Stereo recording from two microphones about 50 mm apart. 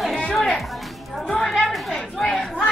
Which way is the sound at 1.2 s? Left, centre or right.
Centre.